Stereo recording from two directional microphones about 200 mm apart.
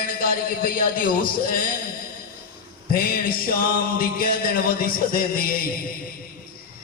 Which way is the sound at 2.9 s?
45° left (ahead or behind).